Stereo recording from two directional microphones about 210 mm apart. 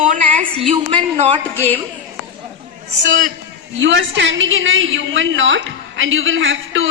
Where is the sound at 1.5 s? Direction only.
10° left (ahead or behind).